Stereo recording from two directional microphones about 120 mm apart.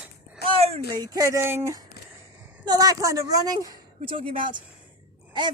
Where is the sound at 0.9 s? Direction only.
30° right (ahead or behind).